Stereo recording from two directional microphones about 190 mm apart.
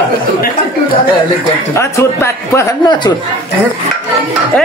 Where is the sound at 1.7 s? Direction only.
15° left (ahead or behind).